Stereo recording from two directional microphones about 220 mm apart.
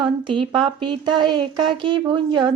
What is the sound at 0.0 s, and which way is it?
Speech, 20° right (ahead or behind).